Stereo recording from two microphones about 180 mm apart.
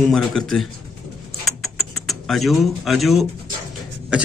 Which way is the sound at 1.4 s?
Centre (ahead or behind).